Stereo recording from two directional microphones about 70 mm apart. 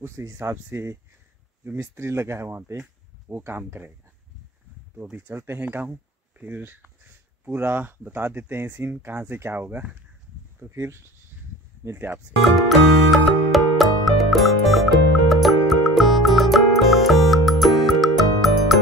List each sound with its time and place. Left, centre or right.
0.0 s speech: right
2.0 s speech: right
2.8 s a sound: right
3.4 s speech: right
5.1 s speech: right
10.6 s speech: right
12.4 s music: centre